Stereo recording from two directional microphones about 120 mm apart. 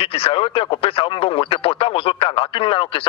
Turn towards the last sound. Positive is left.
turn(degrees=50)  # may be behind; listen again after turning